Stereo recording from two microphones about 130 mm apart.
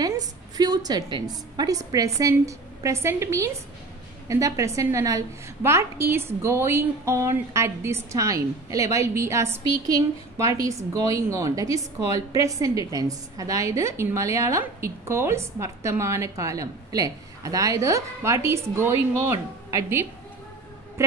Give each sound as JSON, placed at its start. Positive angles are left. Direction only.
{"t": 0.0, "sound": "a woman's voice", "side_deg": -30}